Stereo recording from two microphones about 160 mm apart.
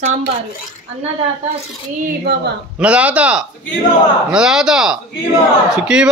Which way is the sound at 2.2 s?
90° right.